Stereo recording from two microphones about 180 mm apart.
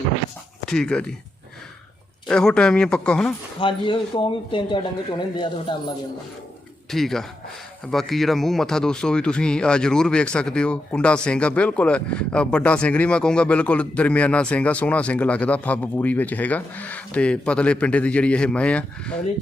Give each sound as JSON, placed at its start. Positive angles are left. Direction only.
{"t": 0.6, "sound": "speech", "side_deg": 5}
{"t": 2.2, "sound": "speech", "side_deg": 5}
{"t": 3.6, "sound": "speech", "side_deg": 25}
{"t": 6.9, "sound": "speech", "side_deg": 0}